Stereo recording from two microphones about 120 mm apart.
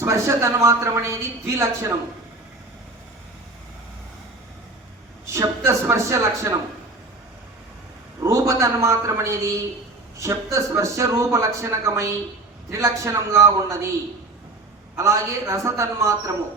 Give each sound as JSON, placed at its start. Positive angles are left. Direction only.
{"t": 0.0, "sound": "a man's voice", "side_deg": -25}
{"t": 5.2, "sound": "a man's voice", "side_deg": -25}
{"t": 8.2, "sound": "a man's voice", "side_deg": -25}
{"t": 14.9, "sound": "a man's voice", "side_deg": -25}